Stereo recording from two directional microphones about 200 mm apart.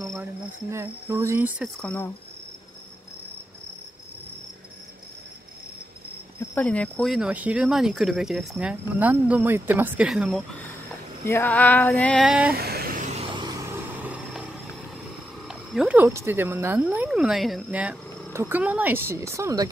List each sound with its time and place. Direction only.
0.1 s speech: 15° right (ahead or behind)
1.6 s female singing: 5° left (ahead or behind)
6.5 s speech: 5° left (ahead or behind)
11.2 s female singing: 10° left (ahead or behind); by 12.5 s 5° right (ahead or behind)
12.5 s vehicle: 50° right (ahead or behind)
14.0 s vehicle: 5° right (ahead or behind)
15.4 s speech: centre (ahead or behind)